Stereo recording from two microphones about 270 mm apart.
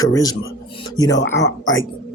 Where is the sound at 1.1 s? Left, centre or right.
Left.